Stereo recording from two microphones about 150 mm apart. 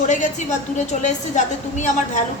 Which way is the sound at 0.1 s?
55° left (ahead or behind).